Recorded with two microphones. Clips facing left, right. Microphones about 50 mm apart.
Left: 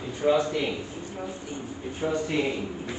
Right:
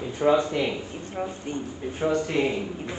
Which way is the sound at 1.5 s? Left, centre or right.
Right.